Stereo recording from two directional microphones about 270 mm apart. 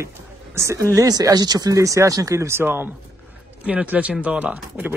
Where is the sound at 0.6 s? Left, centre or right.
Centre.